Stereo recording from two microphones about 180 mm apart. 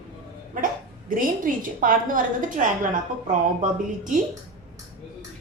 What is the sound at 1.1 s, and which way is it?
A woman's voice, 50° right (ahead or behind).